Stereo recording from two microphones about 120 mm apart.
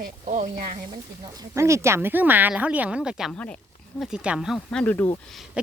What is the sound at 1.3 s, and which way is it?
Speech, 25° right (ahead or behind).